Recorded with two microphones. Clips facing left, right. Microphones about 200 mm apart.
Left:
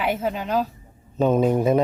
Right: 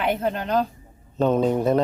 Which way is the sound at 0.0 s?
5° left (ahead or behind).